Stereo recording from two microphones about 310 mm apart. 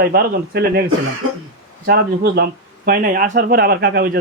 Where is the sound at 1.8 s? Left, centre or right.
Right.